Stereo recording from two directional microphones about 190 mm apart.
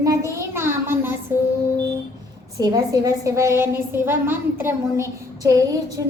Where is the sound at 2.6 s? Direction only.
20° right (ahead or behind).